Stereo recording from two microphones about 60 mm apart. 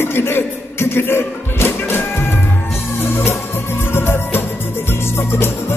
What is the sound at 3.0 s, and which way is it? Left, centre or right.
Music, left.